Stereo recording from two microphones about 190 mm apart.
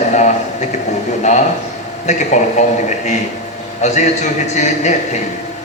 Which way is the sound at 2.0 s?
40° left (ahead or behind).